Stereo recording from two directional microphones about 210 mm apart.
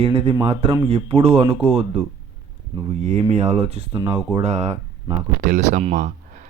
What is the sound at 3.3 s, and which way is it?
Speech, 30° right (ahead or behind).